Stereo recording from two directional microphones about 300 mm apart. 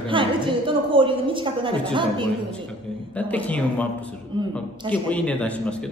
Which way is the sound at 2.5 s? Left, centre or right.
Centre.